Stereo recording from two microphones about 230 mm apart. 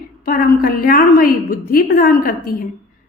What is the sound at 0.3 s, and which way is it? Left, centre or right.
A woman's voice, left.